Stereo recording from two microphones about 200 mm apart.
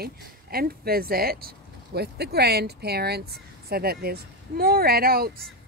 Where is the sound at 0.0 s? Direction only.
50° right (ahead or behind).